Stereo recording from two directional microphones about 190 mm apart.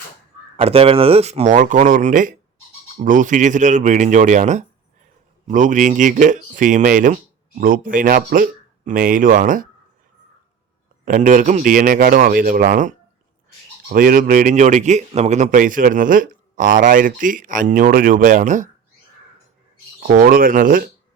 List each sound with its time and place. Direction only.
0.5 s a man's voice: 30° right (ahead or behind)
11.0 s a man's voice: 45° right (ahead or behind)
13.9 s a man's voice: 50° right (ahead or behind)
20.0 s a man's voice: 50° right (ahead or behind)